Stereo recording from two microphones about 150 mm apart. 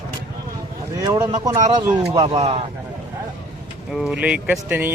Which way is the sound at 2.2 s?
45° right (ahead or behind).